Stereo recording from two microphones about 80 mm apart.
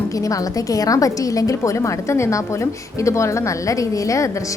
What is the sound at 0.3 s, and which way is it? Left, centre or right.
A woman's voice, left.